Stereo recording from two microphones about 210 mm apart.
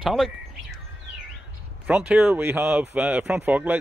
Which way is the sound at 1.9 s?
5° right (ahead or behind).